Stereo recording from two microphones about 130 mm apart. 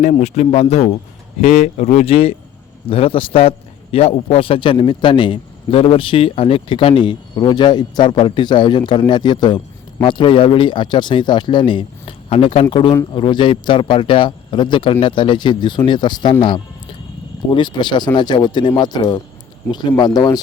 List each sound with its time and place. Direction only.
0.0 s a man's voice: 60° left (ahead or behind); by 16.3 s 35° left (ahead or behind)
17.5 s a man's voice: 35° left (ahead or behind)